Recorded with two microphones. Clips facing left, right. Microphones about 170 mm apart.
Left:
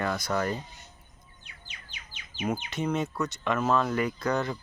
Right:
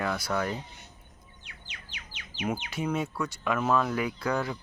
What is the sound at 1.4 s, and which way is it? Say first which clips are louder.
Music: right 1 dB; 85° right.